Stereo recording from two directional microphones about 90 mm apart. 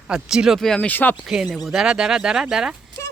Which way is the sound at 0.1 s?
5° right (ahead or behind).